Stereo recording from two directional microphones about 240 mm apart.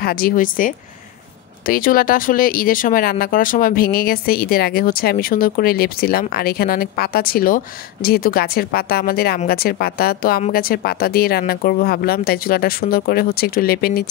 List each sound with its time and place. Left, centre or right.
0.0 s speech: left